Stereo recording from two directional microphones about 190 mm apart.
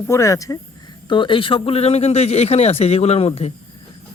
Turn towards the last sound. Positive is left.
turn(degrees=30)  # may be behind; listen again after turning